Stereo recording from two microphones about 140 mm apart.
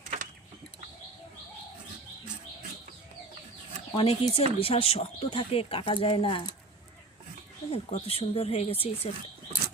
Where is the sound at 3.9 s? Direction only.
40° left (ahead or behind).